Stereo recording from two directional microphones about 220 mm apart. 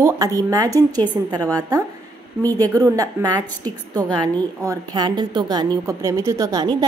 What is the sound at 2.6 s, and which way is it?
Speech, 15° right (ahead or behind).